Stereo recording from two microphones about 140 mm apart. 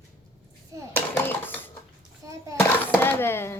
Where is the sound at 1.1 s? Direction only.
15° left (ahead or behind).